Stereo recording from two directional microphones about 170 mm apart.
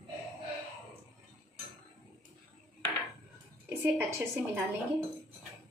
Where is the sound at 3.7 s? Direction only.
15° right (ahead or behind).